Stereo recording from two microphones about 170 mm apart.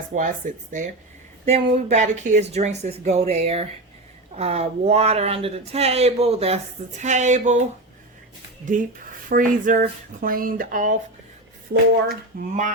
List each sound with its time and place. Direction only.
0.1 s speech: 50° right (ahead or behind)
1.5 s speech: 40° right (ahead or behind)
8.7 s speech: 50° right (ahead or behind)
12.3 s speech: 55° right (ahead or behind)